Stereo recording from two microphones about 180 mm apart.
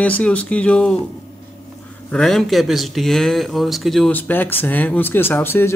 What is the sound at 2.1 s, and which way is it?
Speech, 5° left (ahead or behind).